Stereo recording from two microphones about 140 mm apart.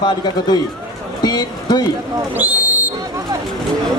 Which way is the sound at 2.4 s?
15° right (ahead or behind).